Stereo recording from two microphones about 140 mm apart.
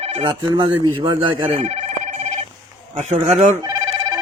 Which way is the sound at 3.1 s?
50° right (ahead or behind).